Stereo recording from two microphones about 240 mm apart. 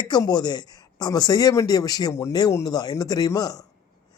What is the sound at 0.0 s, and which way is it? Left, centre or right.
Speech, centre.